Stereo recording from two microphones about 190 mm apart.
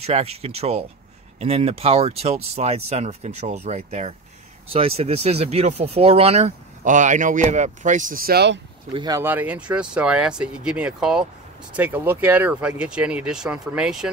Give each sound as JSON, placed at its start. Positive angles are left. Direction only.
{"t": 0.0, "sound": "speech", "side_deg": -35}
{"t": 8.9, "sound": "speech", "side_deg": -20}
{"t": 9.2, "sound": "speech", "side_deg": -10}